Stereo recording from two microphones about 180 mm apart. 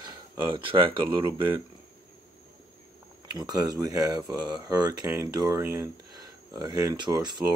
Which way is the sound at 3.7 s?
20° right (ahead or behind).